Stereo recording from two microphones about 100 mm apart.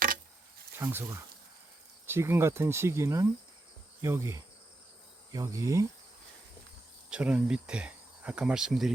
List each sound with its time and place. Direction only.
0.8 s speech: 25° right (ahead or behind)
5.3 s insect: 35° right (ahead or behind)
7.1 s speech: 10° right (ahead or behind)